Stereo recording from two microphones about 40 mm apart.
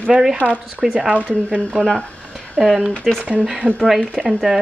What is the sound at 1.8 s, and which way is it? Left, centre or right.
Speech, left.